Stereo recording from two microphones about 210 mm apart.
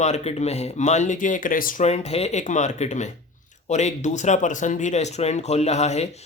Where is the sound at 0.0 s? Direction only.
30° left (ahead or behind).